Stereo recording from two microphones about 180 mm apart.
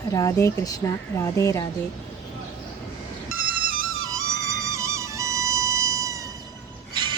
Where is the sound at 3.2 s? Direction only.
50° right (ahead or behind).